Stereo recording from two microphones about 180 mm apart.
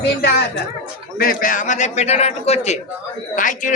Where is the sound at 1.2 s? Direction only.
50° left (ahead or behind).